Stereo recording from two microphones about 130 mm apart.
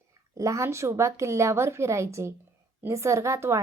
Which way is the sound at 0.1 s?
25° right (ahead or behind).